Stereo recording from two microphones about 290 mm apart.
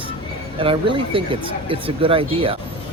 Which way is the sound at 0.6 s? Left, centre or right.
Centre.